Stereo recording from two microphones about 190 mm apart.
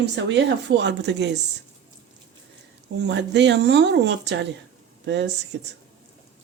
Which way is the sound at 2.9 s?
65° right (ahead or behind).